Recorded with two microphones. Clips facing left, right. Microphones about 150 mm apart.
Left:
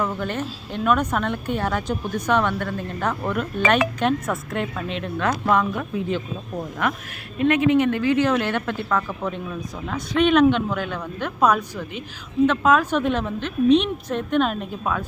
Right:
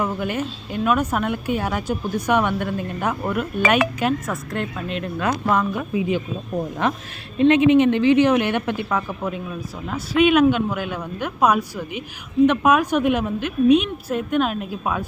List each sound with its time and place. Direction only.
0.0 s speech: 10° right (ahead or behind)
4.0 s speech: centre (ahead or behind)
6.8 s speech: 30° right (ahead or behind); by 14.8 s 5° right (ahead or behind)